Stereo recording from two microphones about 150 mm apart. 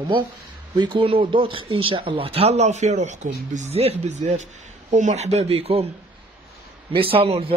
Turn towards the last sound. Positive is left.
turn(degrees=-40)  # may be behind; listen again after turning